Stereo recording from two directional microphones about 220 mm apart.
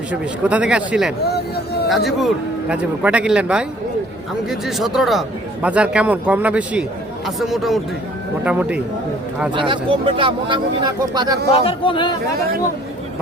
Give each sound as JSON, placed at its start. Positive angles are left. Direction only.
{"t": 0.1, "sound": "a man's voice", "side_deg": -5}
{"t": 1.2, "sound": "speech", "side_deg": 45}
{"t": 2.0, "sound": "a man's voice", "side_deg": 0}
{"t": 9.6, "sound": "speech", "side_deg": -25}
{"t": 11.5, "sound": "a man's voice", "side_deg": 25}